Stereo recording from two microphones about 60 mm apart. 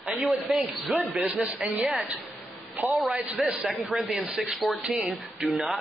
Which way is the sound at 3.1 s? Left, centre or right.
Right.